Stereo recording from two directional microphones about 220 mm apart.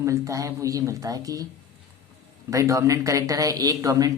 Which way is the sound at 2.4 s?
15° right (ahead or behind).